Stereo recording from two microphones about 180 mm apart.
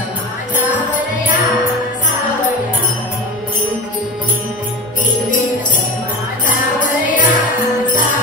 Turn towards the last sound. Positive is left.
turn(degrees=45)  # may be behind; listen again after turning